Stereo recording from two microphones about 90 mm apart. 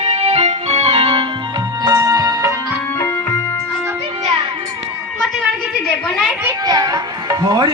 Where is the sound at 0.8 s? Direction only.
90° right.